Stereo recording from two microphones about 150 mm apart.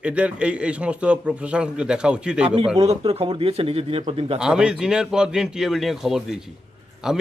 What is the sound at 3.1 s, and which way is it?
Speech, 40° right (ahead or behind).